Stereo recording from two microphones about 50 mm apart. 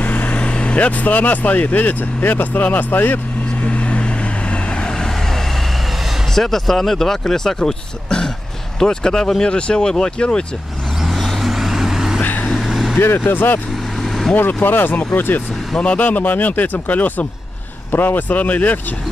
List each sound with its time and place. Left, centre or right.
0.0 s speech: left
3.6 s vehicle: left
6.3 s speech: centre
11.0 s vehicle: centre
12.2 s vehicle: left
12.5 s vehicle: centre
13.2 s speech: left
13.9 s vehicle: centre
14.6 s speech: left
15.8 s speech: left